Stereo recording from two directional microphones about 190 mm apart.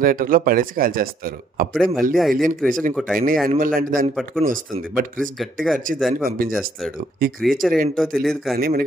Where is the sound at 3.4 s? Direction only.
45° right (ahead or behind).